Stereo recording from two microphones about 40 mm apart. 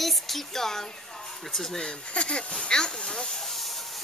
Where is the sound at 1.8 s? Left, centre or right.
Left.